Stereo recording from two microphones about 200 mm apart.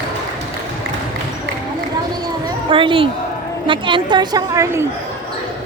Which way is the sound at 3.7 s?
25° right (ahead or behind).